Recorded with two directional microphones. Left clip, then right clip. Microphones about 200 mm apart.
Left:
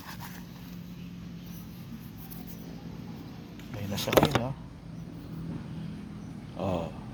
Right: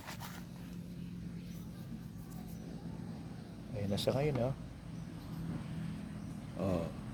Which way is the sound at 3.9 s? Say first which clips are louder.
Left 10 dB; 35° right (ahead or behind).